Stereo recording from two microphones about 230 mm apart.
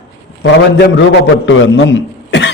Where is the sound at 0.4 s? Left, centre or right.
Left.